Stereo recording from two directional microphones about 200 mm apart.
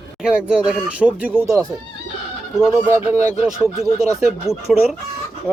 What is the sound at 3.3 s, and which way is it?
Speech, 5° right (ahead or behind).